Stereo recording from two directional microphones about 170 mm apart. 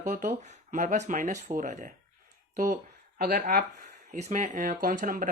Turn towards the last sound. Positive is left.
turn(degrees=-55)  # may be behind; listen again after turning